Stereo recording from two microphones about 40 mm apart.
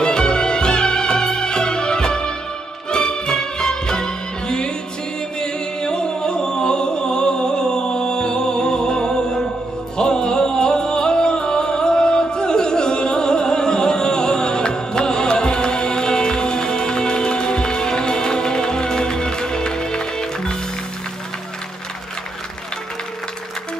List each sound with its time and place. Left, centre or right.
0.0 s music: left